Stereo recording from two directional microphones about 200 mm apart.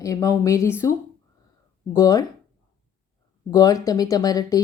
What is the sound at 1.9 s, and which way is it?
Speech, 15° left (ahead or behind).